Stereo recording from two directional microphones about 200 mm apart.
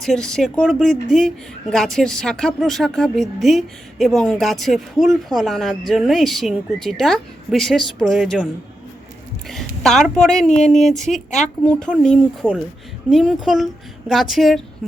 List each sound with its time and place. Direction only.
0.0 s a woman's voice: centre (ahead or behind)
9.5 s a woman's voice: centre (ahead or behind)